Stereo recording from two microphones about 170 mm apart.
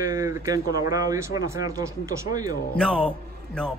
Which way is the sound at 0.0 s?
20° right (ahead or behind).